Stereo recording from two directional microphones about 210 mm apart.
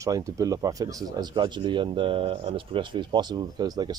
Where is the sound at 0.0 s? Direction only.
15° right (ahead or behind).